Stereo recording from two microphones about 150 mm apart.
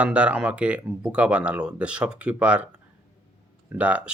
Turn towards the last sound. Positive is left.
turn(degrees=-10)  # may be behind; listen again after turning